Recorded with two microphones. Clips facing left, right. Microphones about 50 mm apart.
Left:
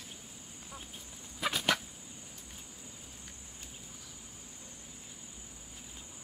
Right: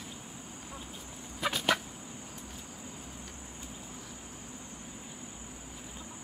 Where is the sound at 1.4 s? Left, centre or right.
Centre.